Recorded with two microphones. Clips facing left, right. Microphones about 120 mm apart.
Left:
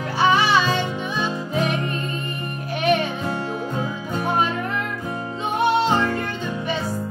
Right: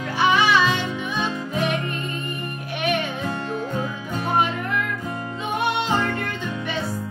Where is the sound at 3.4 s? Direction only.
15° left (ahead or behind).